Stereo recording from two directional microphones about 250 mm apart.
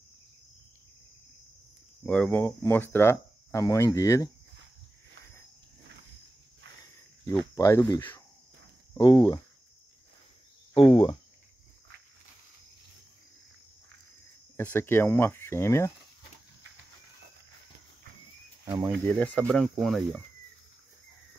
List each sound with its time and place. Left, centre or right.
2.0 s speech: centre
7.2 s speech: centre
10.7 s speech: left
14.6 s speech: centre
18.7 s speech: centre
19.0 s speech: centre